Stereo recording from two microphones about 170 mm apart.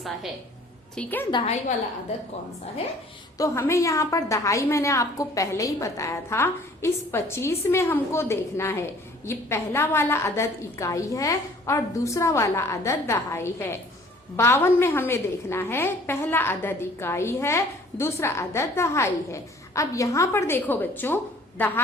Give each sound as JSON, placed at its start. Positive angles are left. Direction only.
{"t": 0.9, "sound": "a woman's voice", "side_deg": 10}
{"t": 3.3, "sound": "a woman's voice", "side_deg": 15}